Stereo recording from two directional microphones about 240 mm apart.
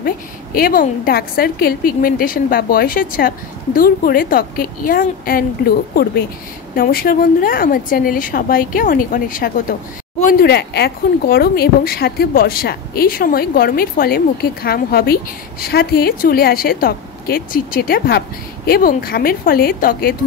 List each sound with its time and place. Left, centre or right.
0.6 s speech: left
6.7 s speech: left